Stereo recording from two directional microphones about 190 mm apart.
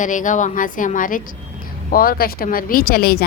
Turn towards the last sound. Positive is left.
turn(degrees=55)  # may be behind; listen again after turning